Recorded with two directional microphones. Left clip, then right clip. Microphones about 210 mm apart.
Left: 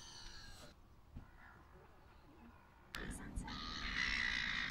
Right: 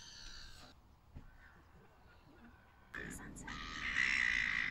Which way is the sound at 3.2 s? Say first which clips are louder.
Even; 40° right (ahead or behind).